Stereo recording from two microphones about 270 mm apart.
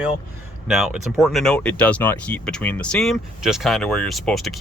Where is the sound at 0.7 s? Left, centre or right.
Centre.